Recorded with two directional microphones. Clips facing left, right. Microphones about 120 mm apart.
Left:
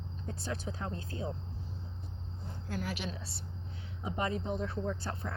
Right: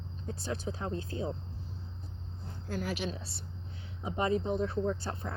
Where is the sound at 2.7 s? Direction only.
30° right (ahead or behind).